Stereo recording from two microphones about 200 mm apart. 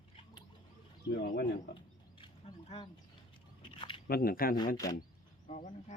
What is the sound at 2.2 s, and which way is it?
Speech, 25° left (ahead or behind).